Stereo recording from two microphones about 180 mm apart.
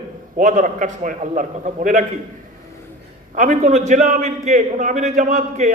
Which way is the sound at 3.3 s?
45° right (ahead or behind).